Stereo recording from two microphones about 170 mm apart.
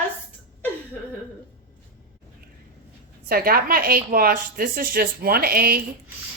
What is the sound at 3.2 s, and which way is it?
A woman's voice, 60° right (ahead or behind).